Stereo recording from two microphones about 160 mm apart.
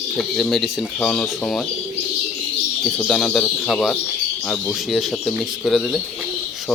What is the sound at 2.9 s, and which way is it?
Speech, 5° left (ahead or behind).